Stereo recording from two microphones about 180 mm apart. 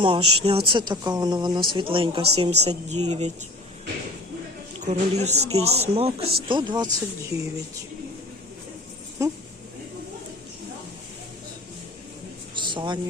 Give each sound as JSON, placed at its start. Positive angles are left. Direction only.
{"t": 0.0, "sound": "speech", "side_deg": -30}
{"t": 4.9, "sound": "speech", "side_deg": -40}
{"t": 12.5, "sound": "a sound", "side_deg": -25}